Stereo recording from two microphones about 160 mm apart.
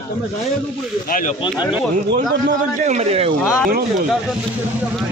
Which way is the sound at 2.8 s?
45° right (ahead or behind).